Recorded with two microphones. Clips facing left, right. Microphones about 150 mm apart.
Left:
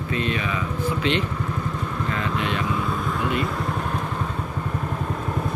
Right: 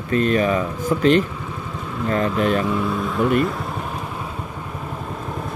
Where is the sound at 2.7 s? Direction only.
Centre (ahead or behind).